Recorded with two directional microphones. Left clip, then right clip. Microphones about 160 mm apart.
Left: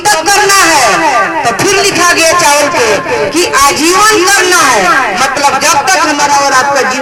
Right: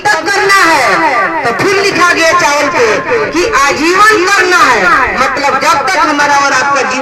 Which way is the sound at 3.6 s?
45° left (ahead or behind).